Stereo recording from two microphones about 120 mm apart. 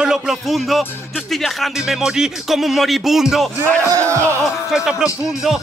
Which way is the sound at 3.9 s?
25° right (ahead or behind).